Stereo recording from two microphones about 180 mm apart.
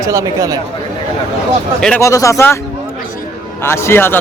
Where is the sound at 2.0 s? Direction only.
15° left (ahead or behind).